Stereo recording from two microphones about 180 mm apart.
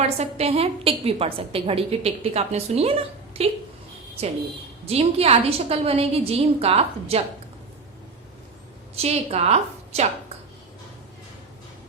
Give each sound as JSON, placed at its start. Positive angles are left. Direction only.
{"t": 0.2, "sound": "a woman's voice", "side_deg": -35}
{"t": 4.9, "sound": "a woman's voice", "side_deg": -35}
{"t": 9.0, "sound": "a woman's voice", "side_deg": -35}